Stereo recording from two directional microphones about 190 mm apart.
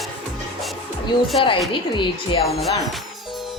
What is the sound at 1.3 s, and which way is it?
A woman's voice, 25° left (ahead or behind).